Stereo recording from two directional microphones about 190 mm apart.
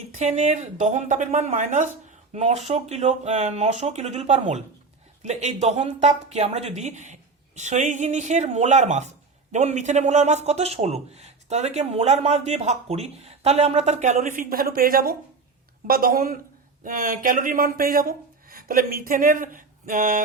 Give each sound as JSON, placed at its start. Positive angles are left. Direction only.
{"t": 0.2, "sound": "a man's voice", "side_deg": -35}